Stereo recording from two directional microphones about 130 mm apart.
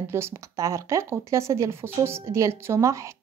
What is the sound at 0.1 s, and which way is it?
Speech, 20° right (ahead or behind).